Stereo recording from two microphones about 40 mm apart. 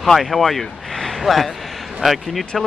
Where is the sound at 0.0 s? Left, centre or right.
Centre.